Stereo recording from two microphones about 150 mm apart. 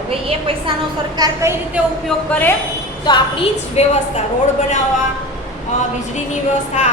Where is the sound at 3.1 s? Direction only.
30° left (ahead or behind).